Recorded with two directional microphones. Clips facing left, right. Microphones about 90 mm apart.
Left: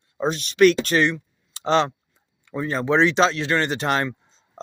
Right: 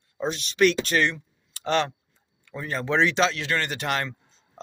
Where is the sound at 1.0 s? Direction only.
20° left (ahead or behind).